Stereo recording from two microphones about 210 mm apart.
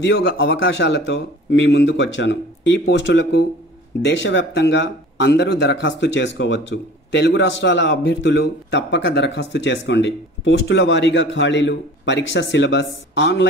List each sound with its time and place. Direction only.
0.0 s speech: 60° left (ahead or behind)